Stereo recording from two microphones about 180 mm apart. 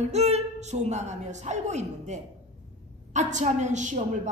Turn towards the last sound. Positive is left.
turn(degrees=-40)  # may be behind; listen again after turning